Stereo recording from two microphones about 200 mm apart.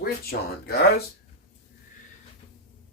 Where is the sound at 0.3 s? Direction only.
50° left (ahead or behind).